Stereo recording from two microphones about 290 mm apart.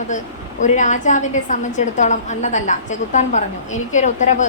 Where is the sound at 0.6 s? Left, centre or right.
Left.